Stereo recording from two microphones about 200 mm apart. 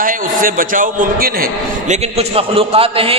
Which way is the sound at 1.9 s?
30° right (ahead or behind).